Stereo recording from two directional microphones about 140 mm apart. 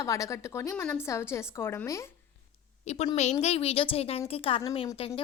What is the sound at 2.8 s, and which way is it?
A woman's voice, 50° left (ahead or behind).